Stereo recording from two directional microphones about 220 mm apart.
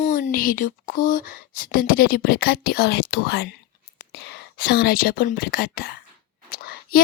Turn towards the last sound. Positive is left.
turn(degrees=40)  # may be behind; listen again after turning